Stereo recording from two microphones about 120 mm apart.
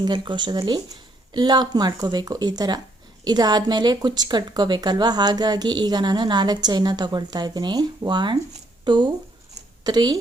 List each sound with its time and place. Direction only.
0.0 s a woman's voice: 40° right (ahead or behind)